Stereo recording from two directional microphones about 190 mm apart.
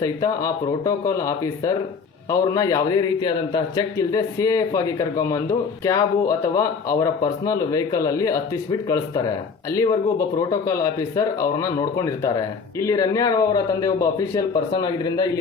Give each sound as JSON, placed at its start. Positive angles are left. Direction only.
{"t": 0.0, "sound": "a man's voice", "side_deg": 20}